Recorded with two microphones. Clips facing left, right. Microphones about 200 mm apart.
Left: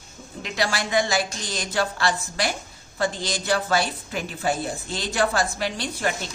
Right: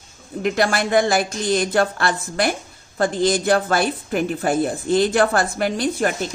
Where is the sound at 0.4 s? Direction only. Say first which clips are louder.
Right 7 dB; 55° right (ahead or behind).